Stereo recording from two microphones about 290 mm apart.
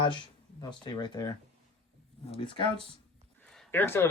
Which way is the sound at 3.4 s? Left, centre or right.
Centre.